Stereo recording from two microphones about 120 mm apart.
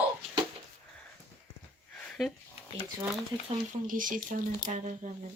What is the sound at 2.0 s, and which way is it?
Sniff, centre (ahead or behind).